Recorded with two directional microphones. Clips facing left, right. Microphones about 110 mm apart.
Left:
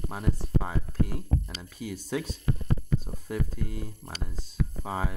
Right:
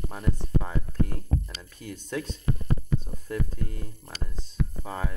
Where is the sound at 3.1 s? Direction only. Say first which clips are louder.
Left 1 dB; 30° left (ahead or behind).